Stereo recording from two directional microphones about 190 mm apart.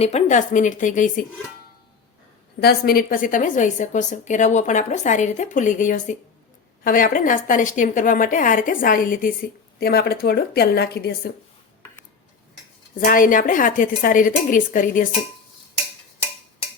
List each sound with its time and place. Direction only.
0.0 s a woman's voice: 35° left (ahead or behind)
2.6 s a woman's voice: 55° left (ahead or behind)
13.0 s a woman's voice: 45° left (ahead or behind)